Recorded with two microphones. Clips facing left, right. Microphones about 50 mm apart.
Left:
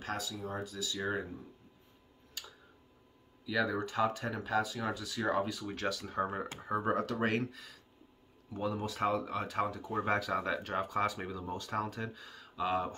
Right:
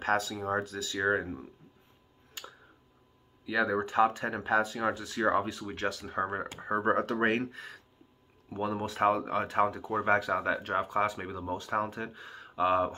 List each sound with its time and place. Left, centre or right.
0.0 s speech: right
2.4 s a sound: right
3.4 s speech: right
9.8 s speech: centre